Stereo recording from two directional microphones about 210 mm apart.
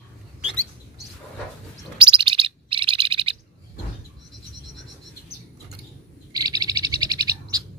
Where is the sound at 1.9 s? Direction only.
25° right (ahead or behind).